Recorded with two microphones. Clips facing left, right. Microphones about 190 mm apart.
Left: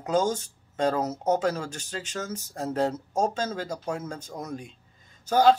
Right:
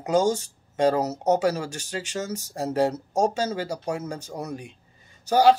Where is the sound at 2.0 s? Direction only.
75° right (ahead or behind).